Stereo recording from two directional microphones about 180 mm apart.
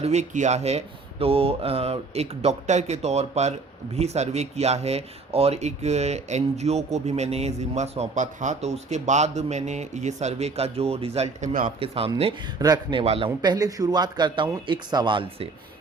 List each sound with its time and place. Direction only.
0.0 s speech: 40° right (ahead or behind)
11.8 s speech: 30° right (ahead or behind)